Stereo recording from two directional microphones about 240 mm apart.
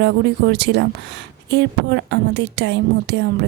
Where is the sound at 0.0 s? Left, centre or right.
Right.